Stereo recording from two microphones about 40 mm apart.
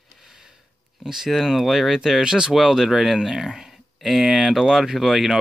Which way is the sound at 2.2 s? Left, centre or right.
Centre.